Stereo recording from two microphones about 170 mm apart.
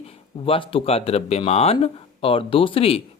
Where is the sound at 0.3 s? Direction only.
35° left (ahead or behind).